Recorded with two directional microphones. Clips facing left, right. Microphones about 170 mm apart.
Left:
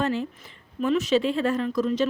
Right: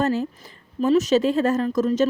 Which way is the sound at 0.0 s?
40° right (ahead or behind).